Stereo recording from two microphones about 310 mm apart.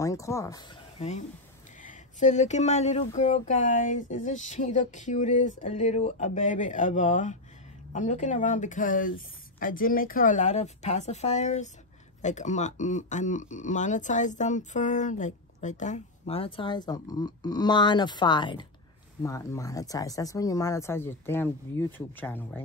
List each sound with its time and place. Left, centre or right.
0.0 s speech: centre